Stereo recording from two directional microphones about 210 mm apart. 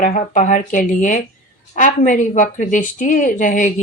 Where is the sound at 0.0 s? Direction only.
35° left (ahead or behind).